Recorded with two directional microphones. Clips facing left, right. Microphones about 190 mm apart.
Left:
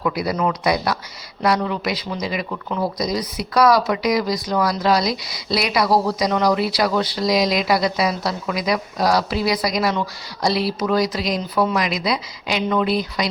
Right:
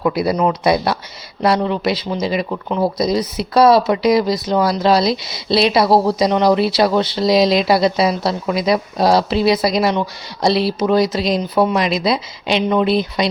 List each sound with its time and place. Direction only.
0.0 s speech: 30° right (ahead or behind)